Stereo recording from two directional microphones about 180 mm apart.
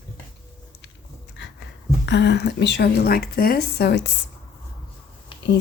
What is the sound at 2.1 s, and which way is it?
A woman's voice, 75° left (ahead or behind).